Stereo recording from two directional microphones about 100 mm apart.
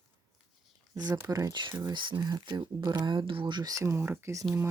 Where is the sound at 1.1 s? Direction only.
30° right (ahead or behind).